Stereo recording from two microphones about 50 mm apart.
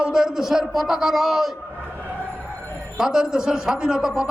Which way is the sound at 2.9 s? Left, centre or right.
Centre.